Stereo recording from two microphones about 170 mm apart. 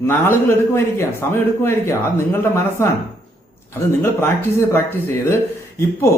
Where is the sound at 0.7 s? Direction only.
15° left (ahead or behind).